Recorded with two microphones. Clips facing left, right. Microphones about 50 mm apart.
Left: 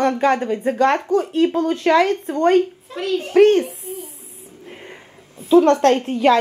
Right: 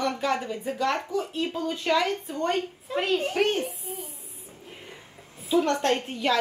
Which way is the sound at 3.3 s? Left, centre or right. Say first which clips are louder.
Left 12 dB; left.